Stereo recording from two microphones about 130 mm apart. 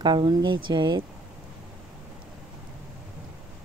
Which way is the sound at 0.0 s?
35° right (ahead or behind).